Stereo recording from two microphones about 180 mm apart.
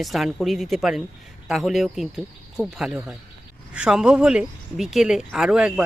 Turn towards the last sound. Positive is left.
turn(degrees=-5)  # may be behind; listen again after turning